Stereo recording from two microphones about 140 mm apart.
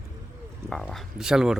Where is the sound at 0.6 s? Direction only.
5° left (ahead or behind).